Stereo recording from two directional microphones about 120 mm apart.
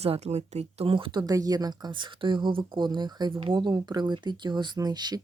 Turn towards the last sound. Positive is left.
turn(degrees=-35)  # may be behind; listen again after turning